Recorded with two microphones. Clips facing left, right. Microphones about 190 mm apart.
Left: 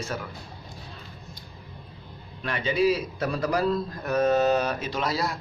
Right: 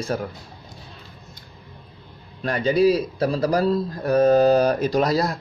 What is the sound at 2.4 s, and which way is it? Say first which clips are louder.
A man's voice: right 6 dB; 40° right (ahead or behind).